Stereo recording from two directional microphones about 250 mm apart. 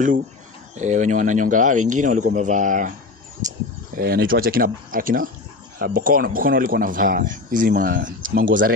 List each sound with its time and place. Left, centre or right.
0.7 s speech: right
3.9 s speech: right
8.5 s speech: right